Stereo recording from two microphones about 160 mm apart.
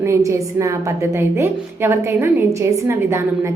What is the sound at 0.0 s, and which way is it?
A woman's voice, 20° right (ahead or behind).